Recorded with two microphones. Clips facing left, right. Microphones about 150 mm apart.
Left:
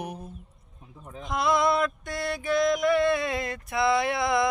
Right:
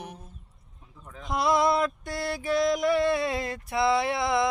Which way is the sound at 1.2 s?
35° right (ahead or behind).